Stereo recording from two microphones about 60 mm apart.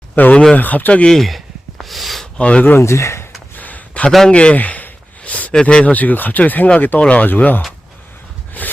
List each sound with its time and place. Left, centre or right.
0.2 s speech: left
1.1 s speech: centre
1.8 s a sound: centre
2.4 s speech: left
2.8 s speech: left
3.6 s a sound: left
4.3 s speech: centre
8.6 s snort: left